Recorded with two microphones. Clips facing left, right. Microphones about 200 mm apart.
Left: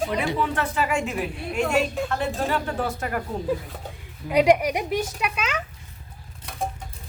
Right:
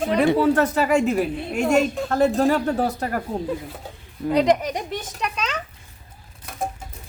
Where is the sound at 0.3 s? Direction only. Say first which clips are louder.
Right 7 dB; 40° right (ahead or behind).